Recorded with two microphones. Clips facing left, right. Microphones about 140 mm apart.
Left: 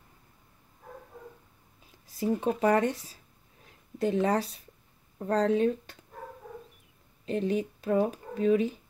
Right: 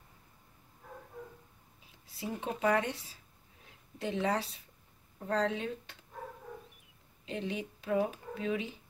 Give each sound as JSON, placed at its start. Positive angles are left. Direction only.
{"t": 2.0, "sound": "speech", "side_deg": 45}
{"t": 7.2, "sound": "speech", "side_deg": 45}